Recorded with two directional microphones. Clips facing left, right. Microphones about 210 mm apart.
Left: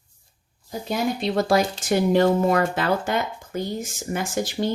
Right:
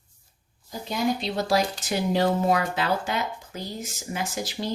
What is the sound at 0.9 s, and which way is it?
Speech, 50° left (ahead or behind).